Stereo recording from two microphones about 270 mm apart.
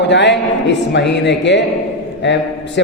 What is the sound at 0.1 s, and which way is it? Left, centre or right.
A man's voice, left.